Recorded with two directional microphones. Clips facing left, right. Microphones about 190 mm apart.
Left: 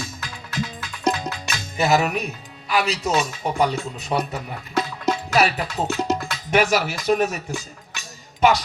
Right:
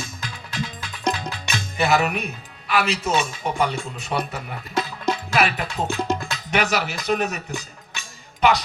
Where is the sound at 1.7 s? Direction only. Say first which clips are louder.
Left 1 dB; 40° left (ahead or behind).